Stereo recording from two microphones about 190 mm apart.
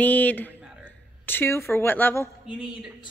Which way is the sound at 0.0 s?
10° left (ahead or behind).